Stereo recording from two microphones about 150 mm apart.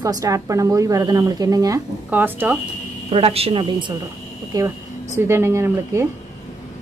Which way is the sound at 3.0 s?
40° right (ahead or behind).